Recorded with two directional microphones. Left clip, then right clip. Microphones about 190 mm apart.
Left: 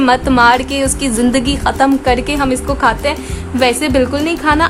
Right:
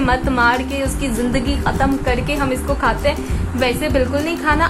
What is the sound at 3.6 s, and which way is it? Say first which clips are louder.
Music: left 5 dB; 55° left (ahead or behind).